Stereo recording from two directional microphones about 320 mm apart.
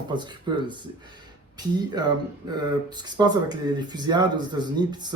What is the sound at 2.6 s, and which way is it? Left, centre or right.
Speech, centre.